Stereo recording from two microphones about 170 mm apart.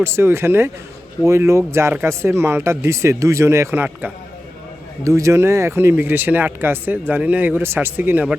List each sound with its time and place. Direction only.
0.0 s speech: 15° right (ahead or behind)